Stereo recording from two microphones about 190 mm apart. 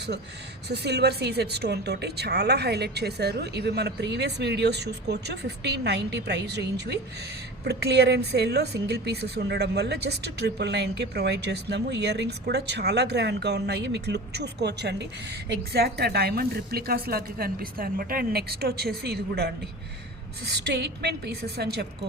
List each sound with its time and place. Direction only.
0.7 s speech: 60° right (ahead or behind)